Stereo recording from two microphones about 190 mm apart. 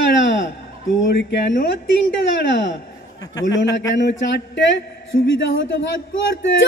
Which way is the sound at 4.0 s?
65° left (ahead or behind).